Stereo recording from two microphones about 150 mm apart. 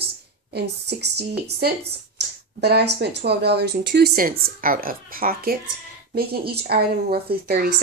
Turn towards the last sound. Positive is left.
turn(degrees=-90)